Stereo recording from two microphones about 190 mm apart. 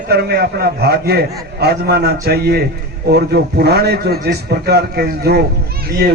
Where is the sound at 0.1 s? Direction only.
55° right (ahead or behind).